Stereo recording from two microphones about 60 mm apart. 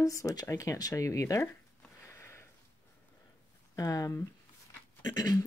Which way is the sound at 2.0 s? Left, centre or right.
Left.